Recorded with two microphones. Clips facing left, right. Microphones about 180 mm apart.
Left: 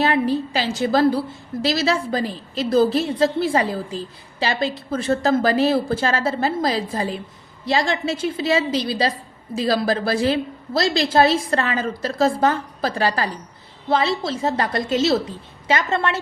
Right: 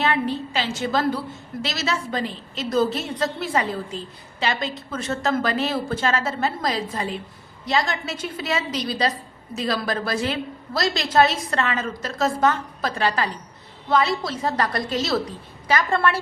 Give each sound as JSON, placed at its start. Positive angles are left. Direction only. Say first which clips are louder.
{"t": 0.0, "sound": "a woman's voice", "louder": "left 4 dB", "side_deg": 35}